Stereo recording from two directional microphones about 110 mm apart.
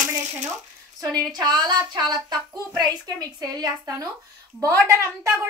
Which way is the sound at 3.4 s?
30° right (ahead or behind).